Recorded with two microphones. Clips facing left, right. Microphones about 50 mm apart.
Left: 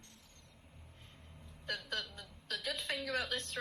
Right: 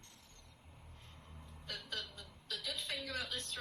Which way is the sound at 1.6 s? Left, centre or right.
Left.